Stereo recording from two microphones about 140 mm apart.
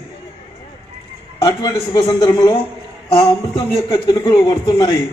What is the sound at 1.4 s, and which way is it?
A man's voice, 30° left (ahead or behind).